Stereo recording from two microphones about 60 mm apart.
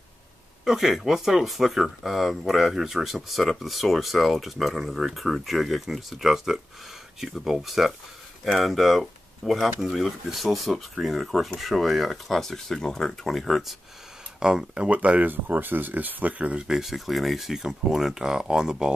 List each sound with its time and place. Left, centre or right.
0.7 s speech: centre; by 16.6 s right
16.6 s speech: centre